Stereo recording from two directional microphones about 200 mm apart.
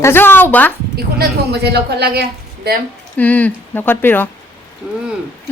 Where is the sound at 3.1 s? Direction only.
10° left (ahead or behind).